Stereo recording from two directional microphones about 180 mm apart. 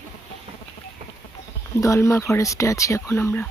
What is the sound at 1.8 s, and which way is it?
Speech, 15° left (ahead or behind).